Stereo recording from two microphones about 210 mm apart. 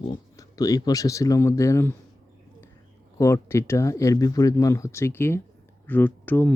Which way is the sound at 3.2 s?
15° left (ahead or behind).